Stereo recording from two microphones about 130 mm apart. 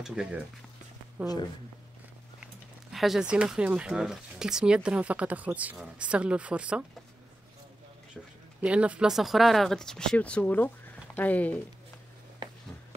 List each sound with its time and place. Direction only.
0.0 s speech: 5° right (ahead or behind)
1.2 s speech: 30° left (ahead or behind)
2.4 s speech: centre (ahead or behind)
8.5 s speech: 10° right (ahead or behind); by 11.6 s 10° left (ahead or behind)